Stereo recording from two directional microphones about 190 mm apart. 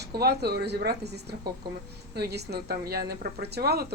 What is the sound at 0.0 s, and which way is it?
A woman's voice, 55° right (ahead or behind).